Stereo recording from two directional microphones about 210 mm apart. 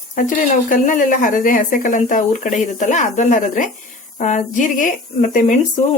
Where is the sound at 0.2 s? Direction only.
40° left (ahead or behind).